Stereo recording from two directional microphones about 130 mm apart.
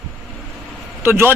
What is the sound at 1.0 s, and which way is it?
Speech, 15° right (ahead or behind).